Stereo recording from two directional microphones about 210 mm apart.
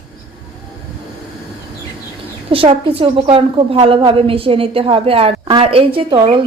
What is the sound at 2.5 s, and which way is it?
Speech, 25° right (ahead or behind).